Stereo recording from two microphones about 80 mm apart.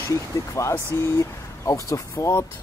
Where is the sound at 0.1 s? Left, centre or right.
Left.